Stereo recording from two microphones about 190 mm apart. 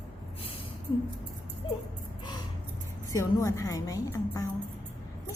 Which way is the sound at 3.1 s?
15° left (ahead or behind).